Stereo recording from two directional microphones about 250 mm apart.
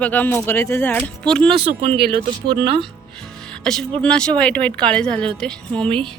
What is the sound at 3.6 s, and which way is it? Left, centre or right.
Speech, centre.